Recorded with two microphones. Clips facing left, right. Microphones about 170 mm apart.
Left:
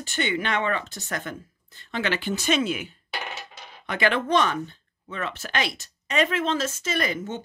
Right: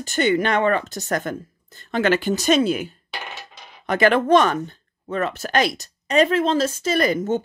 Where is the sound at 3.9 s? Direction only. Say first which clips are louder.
Right 7 dB; 45° right (ahead or behind).